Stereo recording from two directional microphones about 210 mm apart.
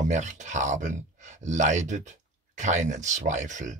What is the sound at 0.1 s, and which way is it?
Speech, 35° right (ahead or behind).